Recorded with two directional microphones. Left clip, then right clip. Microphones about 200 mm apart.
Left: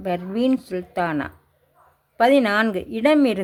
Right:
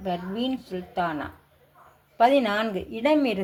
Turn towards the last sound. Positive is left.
turn(degrees=35)  # may be behind; listen again after turning